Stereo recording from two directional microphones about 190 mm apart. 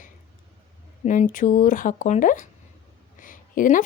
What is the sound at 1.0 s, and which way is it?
Speech, 40° left (ahead or behind).